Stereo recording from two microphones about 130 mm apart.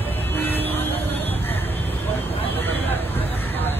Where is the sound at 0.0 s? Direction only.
15° left (ahead or behind).